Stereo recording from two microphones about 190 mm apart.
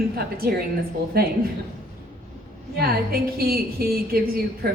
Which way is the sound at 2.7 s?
50° right (ahead or behind).